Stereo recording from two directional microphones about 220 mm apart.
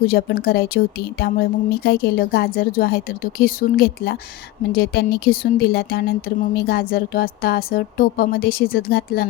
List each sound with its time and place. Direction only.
0.0 s speech: 45° left (ahead or behind)